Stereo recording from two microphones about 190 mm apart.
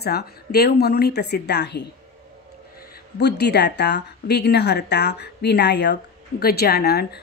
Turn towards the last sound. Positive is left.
turn(degrees=55)  # may be behind; listen again after turning